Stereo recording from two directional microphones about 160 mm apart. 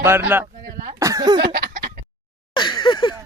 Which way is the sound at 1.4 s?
85° right.